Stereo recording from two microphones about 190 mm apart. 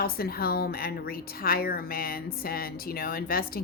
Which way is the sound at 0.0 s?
50° left (ahead or behind).